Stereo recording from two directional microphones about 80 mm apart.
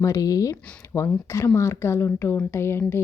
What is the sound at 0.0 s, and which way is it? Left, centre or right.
Speech, left.